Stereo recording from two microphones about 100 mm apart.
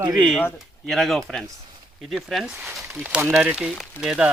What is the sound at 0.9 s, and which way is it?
Speech, 5° left (ahead or behind).